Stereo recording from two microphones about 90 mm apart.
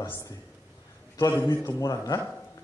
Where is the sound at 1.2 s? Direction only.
30° left (ahead or behind).